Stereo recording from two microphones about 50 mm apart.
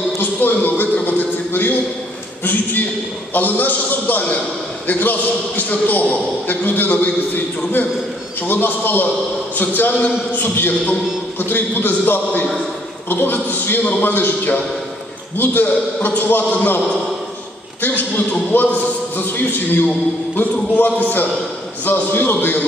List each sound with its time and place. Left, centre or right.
0.2 s a sound: left
3.3 s a man's voice: left
17.8 s a man's voice: left